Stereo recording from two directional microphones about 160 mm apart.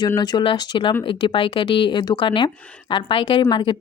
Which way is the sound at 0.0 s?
25° left (ahead or behind).